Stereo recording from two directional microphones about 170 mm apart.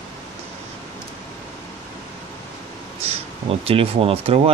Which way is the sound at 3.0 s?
35° right (ahead or behind).